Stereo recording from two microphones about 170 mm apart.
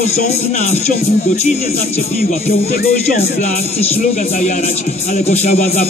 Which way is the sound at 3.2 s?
40° left (ahead or behind).